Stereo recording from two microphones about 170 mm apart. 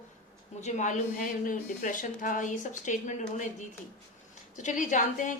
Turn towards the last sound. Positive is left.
turn(degrees=50)  # may be behind; listen again after turning